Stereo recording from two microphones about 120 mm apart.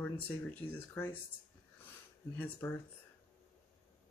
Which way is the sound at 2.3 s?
15° left (ahead or behind).